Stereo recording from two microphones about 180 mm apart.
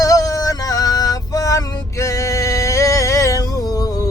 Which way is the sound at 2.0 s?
15° left (ahead or behind).